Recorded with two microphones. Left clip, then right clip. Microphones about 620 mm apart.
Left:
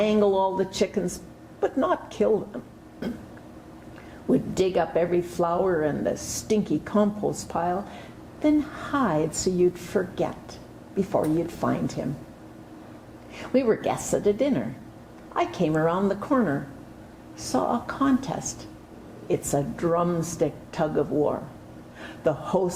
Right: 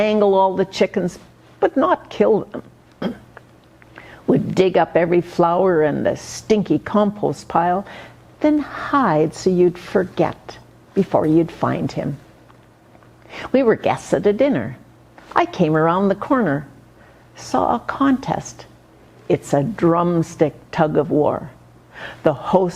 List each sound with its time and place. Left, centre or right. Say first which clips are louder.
0.0 s a woman's voice: right 7 dB; right
4.3 s speech: right 7 dB; right
11.6 s a woman's voice: right 6 dB; right
13.3 s a woman's voice: right 7 dB; right